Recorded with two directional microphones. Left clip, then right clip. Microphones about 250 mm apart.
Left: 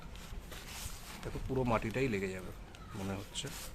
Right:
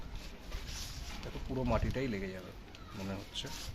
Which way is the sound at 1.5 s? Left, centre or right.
Centre.